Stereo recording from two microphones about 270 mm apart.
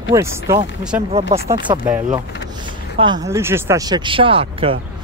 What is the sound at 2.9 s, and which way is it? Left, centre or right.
Speech, centre.